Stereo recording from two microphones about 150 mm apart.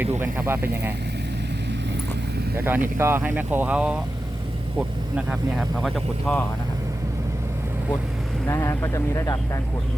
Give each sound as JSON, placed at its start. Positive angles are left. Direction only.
{"t": 0.2, "sound": "speech", "side_deg": -15}
{"t": 2.6, "sound": "speech", "side_deg": -15}
{"t": 8.4, "sound": "speech", "side_deg": 20}